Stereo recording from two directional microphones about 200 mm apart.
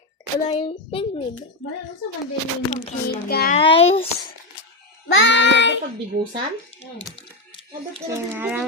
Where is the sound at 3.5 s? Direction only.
30° left (ahead or behind).